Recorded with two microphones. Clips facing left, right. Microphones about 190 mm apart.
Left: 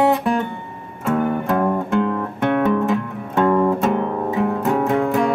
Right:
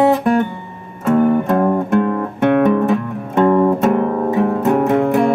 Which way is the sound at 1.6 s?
10° right (ahead or behind).